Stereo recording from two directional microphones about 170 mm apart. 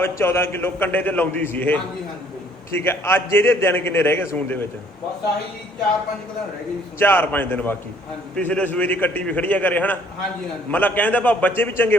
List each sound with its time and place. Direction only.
0.0 s a man's voice: 15° left (ahead or behind)
7.0 s a man's voice: 10° left (ahead or behind)